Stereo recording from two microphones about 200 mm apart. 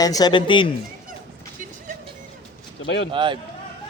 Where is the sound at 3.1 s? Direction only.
25° right (ahead or behind).